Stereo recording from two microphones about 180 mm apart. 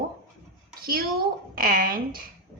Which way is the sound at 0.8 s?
55° right (ahead or behind).